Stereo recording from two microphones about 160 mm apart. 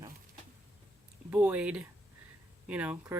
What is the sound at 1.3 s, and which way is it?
Speech, 10° right (ahead or behind).